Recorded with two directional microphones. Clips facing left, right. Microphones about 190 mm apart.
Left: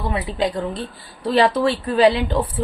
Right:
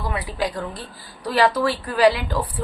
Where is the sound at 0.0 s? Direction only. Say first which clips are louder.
Left 4 dB; 25° left (ahead or behind).